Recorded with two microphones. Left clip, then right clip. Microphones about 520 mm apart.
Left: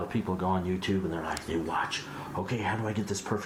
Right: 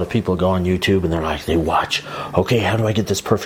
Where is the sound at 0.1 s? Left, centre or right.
Right.